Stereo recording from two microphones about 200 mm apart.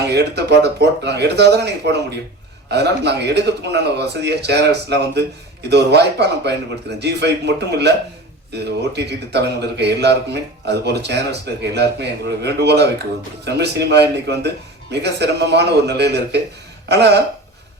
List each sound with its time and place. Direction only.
0.1 s a man's voice: 55° right (ahead or behind)